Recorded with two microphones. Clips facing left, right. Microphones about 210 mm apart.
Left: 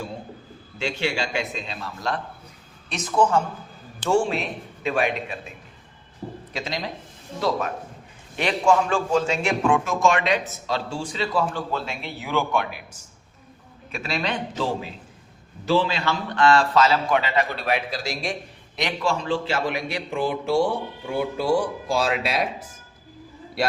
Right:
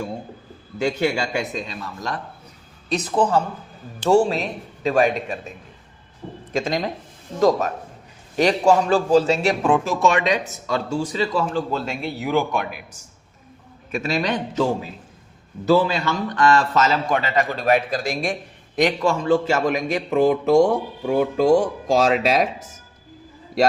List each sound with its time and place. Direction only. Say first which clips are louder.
0.8 s a man's voice: right 5 dB; 40° right (ahead or behind)
6.5 s a man's voice: right 9 dB; 50° right (ahead or behind)
13.9 s a man's voice: right 5 dB; 40° right (ahead or behind)
15.7 s a man's voice: right 4 dB; 45° right (ahead or behind)